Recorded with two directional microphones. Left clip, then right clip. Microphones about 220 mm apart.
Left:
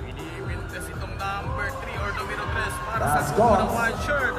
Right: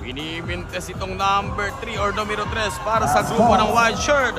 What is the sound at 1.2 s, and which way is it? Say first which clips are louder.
Speech: right 9 dB; 25° right (ahead or behind).